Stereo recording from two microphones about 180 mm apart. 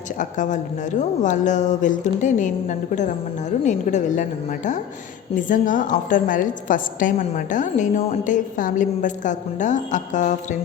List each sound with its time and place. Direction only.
0.2 s a woman's voice: 45° left (ahead or behind)